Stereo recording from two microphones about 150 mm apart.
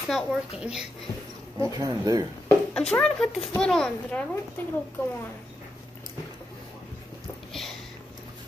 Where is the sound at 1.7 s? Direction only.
25° right (ahead or behind).